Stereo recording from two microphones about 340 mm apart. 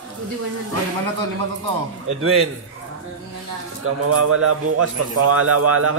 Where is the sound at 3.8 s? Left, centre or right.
Right.